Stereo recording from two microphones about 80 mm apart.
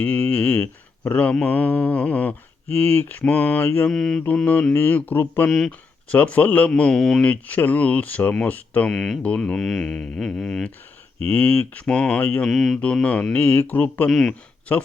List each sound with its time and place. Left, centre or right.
0.0 s mantra: left
3.8 s mantra: centre
4.7 s mantra: left
5.5 s mantra: centre
6.1 s speech: centre
7.3 s mantra: left
8.9 s mantra: centre
9.2 s speech: centre
11.3 s mantra: centre
12.5 s mantra: centre
12.8 s speech: centre
13.3 s mantra: left
14.1 s mantra: centre